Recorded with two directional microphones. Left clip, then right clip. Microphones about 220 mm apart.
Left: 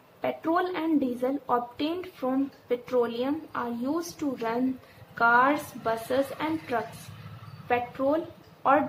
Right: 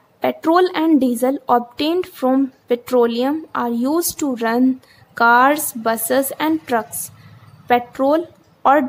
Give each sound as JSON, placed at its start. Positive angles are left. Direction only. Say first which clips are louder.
{"t": 0.2, "sound": "a woman's voice", "louder": "right 12 dB", "side_deg": -50}